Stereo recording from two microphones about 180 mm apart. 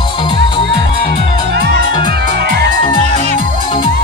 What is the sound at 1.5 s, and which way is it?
Music, 65° right (ahead or behind).